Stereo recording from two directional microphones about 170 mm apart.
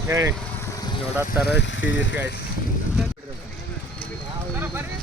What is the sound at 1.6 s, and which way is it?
Speech, 90° left.